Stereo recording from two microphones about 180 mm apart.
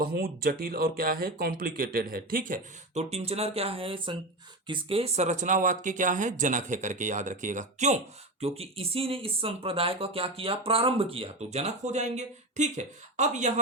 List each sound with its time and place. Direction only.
0.0 s speech: 55° right (ahead or behind); by 13.5 s 40° right (ahead or behind)